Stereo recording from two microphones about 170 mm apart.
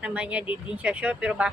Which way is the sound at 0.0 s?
5° right (ahead or behind).